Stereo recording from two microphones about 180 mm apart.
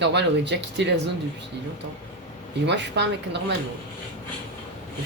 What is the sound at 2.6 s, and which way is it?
Speech, 75° right (ahead or behind).